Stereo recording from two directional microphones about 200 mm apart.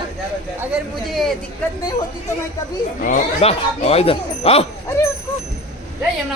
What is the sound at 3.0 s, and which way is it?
Speech, 35° left (ahead or behind).